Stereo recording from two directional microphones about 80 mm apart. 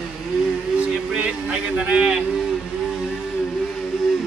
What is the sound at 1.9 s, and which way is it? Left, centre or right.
Speech, centre.